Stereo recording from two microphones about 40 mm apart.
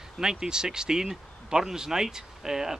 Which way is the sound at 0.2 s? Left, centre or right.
Centre.